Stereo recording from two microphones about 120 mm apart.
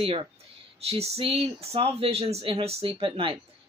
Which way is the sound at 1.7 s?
55° right (ahead or behind).